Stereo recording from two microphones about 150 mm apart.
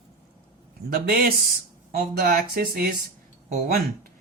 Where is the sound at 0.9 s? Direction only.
80° right.